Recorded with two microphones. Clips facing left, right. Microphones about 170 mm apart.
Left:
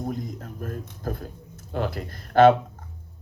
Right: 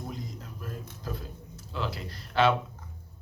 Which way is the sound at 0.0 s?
50° left (ahead or behind).